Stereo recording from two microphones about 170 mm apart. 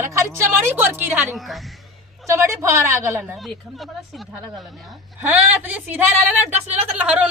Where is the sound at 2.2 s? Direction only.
15° right (ahead or behind).